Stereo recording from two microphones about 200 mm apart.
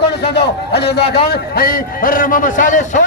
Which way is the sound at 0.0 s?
55° left (ahead or behind).